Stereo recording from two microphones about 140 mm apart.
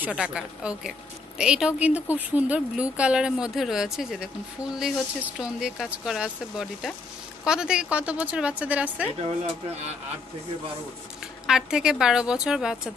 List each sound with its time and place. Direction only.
0.0 s a woman's voice: 5° right (ahead or behind)
11.4 s speech: 5° right (ahead or behind)